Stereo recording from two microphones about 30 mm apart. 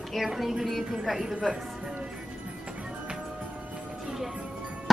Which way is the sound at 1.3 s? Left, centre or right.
Right.